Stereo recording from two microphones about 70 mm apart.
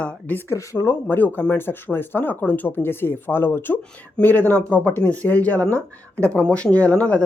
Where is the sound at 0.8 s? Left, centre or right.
Left.